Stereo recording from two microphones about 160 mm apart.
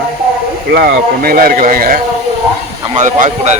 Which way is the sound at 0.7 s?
75° right (ahead or behind).